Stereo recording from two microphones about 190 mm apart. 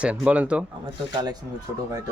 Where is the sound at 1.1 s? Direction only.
20° right (ahead or behind).